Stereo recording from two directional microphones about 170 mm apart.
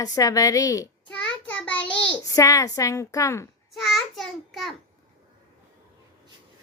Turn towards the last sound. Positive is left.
turn(degrees=0)  # may be behind; listen again after turning